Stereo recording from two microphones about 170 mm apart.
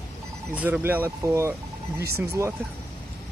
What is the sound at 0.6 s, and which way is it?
Speech, 10° right (ahead or behind).